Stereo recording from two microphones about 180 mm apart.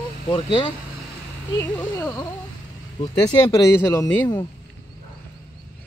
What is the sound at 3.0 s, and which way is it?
A man's voice, 25° left (ahead or behind).